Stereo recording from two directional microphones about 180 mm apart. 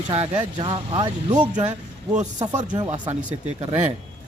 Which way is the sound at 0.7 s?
25° right (ahead or behind).